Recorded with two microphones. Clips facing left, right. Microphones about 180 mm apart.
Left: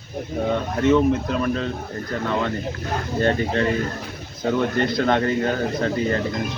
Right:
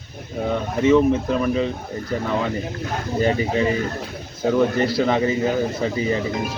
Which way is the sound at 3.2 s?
10° right (ahead or behind).